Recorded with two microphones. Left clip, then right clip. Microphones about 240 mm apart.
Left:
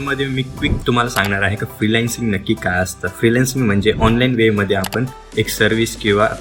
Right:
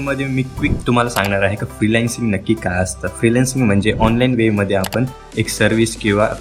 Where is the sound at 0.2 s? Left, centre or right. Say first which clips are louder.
Even; centre.